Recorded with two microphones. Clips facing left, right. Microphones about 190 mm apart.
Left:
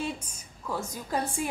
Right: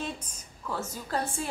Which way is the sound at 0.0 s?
10° left (ahead or behind).